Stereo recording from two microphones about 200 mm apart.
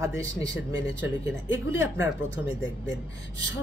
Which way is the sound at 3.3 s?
70° left (ahead or behind).